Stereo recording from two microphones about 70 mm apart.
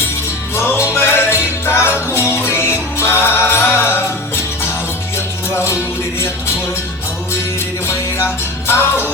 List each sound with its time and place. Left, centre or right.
0.5 s music: left
5.1 s music: left
7.9 s music: left